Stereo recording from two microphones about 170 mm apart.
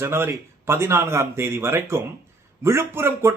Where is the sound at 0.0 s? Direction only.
15° right (ahead or behind).